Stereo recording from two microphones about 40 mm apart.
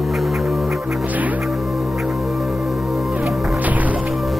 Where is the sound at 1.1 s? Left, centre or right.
Right.